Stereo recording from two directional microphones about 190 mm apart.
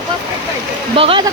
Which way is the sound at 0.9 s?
30° right (ahead or behind).